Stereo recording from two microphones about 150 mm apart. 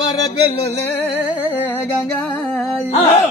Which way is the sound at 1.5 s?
15° left (ahead or behind).